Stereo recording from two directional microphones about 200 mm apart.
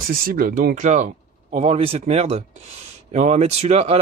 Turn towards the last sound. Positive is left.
turn(degrees=-30)  # may be behind; listen again after turning